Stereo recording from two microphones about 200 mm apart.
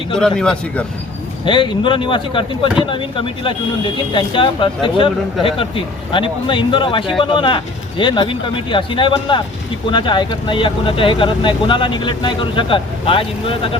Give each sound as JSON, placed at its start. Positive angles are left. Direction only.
{"t": 0.2, "sound": "a man's voice", "side_deg": 5}
{"t": 1.5, "sound": "speech", "side_deg": 25}